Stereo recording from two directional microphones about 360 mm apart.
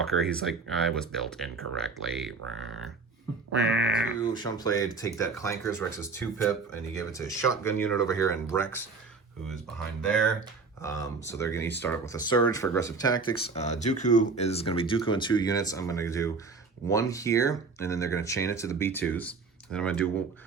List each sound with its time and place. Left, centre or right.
0.4 s speech: centre
3.5 s a sound: right
4.4 s speech: centre